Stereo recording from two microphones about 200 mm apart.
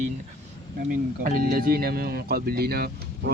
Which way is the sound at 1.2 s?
45° right (ahead or behind).